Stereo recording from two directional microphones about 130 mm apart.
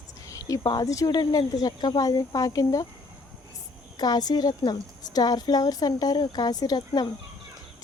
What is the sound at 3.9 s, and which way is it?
A woman's voice, 30° left (ahead or behind).